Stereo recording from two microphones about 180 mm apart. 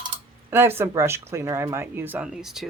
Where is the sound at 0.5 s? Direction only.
15° right (ahead or behind).